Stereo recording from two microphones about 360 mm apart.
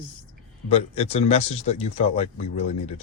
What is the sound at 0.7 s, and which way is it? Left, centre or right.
Speech, centre.